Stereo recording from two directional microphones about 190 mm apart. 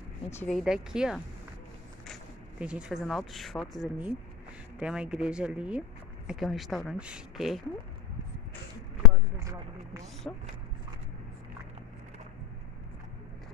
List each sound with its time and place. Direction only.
0.5 s speech: centre (ahead or behind)
2.6 s speech: 5° right (ahead or behind)
9.4 s a sound: 15° right (ahead or behind)
10.3 s speech: 10° left (ahead or behind)